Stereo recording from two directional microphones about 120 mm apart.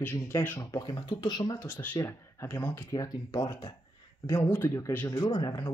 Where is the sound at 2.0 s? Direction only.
25° left (ahead or behind).